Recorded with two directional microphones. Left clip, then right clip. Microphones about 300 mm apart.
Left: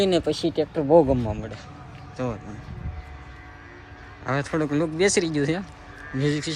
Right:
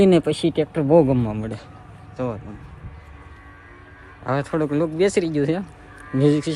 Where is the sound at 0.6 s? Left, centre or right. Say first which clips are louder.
Right 1 dB; right.